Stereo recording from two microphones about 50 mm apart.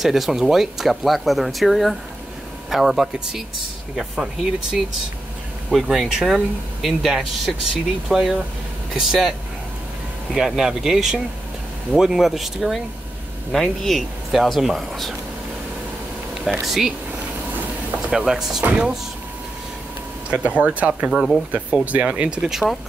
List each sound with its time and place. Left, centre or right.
0.0 s speech: centre
10.3 s speech: centre
16.4 s speech: centre
18.1 s speech: centre
20.2 s speech: right
22.4 s speech: centre